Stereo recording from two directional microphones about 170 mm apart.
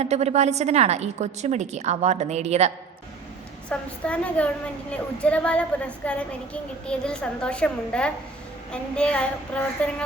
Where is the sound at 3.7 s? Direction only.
10° left (ahead or behind).